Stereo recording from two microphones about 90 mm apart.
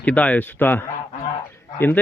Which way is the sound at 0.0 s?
15° left (ahead or behind).